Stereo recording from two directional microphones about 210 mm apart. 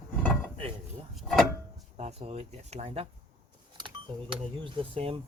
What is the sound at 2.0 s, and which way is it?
Speech, 30° right (ahead or behind).